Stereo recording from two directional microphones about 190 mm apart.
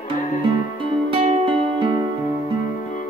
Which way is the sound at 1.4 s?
25° right (ahead or behind).